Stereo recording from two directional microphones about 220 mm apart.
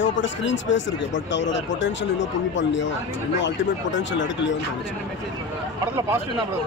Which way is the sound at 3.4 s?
55° left (ahead or behind).